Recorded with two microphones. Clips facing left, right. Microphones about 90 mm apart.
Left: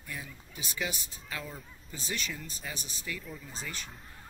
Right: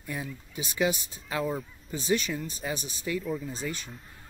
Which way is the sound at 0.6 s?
20° right (ahead or behind).